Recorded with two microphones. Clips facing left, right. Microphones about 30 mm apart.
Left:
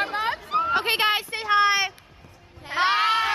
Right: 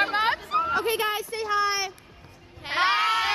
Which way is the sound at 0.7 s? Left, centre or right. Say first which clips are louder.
Left 3 dB; left.